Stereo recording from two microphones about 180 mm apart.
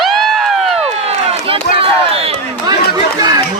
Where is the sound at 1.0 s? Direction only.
30° right (ahead or behind).